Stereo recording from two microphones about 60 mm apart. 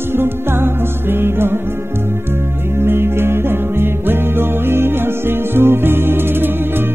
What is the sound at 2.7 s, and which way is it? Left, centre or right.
Music, right.